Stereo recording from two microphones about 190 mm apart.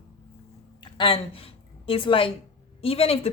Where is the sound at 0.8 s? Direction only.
25° left (ahead or behind).